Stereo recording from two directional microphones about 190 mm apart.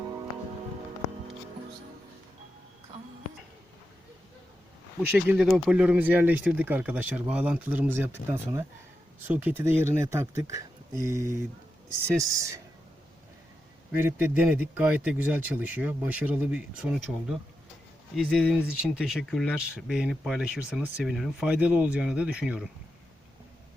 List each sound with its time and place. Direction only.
5.1 s speech: 5° right (ahead or behind)
9.2 s speech: 10° right (ahead or behind)
13.9 s speech: 10° right (ahead or behind)